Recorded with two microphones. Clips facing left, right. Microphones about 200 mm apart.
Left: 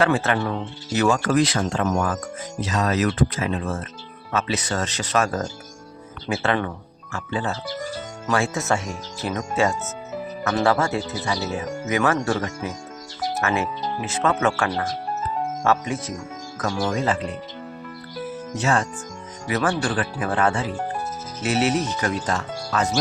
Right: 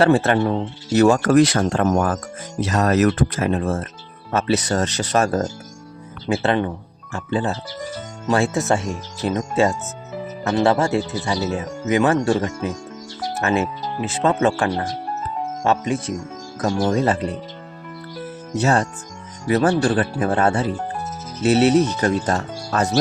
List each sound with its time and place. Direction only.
0.0 s speech: 35° right (ahead or behind)
13.4 s speech: 30° right (ahead or behind)
18.6 s speech: 40° right (ahead or behind)